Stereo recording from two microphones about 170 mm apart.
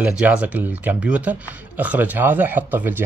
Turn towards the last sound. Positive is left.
turn(degrees=-10)  # may be behind; listen again after turning